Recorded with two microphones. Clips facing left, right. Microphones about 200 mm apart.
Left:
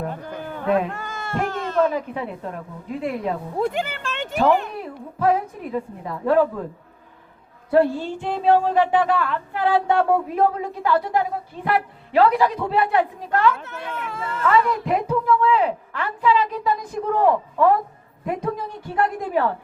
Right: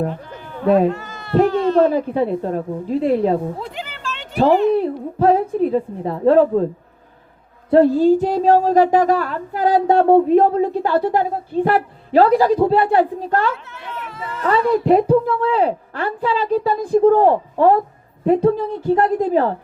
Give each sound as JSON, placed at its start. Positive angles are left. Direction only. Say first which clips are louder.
{"t": 0.1, "sound": "bleat", "louder": "even", "side_deg": 50}
{"t": 0.6, "sound": "a woman's voice", "louder": "right 7 dB", "side_deg": -35}
{"t": 0.9, "sound": "baby cry", "louder": "right 6 dB", "side_deg": 50}
{"t": 1.5, "sound": "a sound", "louder": "right 10 dB", "side_deg": 45}
{"t": 1.8, "sound": "a woman's voice", "louder": "right 6 dB", "side_deg": -35}
{"t": 3.6, "sound": "a sound", "louder": "left 6 dB", "side_deg": 50}
{"t": 4.7, "sound": "a woman's voice", "louder": "right 14 dB", "side_deg": -30}
{"t": 7.8, "sound": "a woman's voice", "louder": "right 7 dB", "side_deg": -40}
{"t": 13.7, "sound": "speech", "louder": "left 1 dB", "side_deg": 50}
{"t": 14.4, "sound": "a woman's voice", "louder": "right 5 dB", "side_deg": -35}